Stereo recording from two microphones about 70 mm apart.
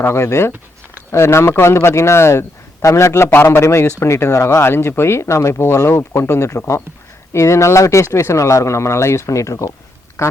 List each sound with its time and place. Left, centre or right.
0.0 s speech: left
3.2 s speech: left
10.2 s quack: left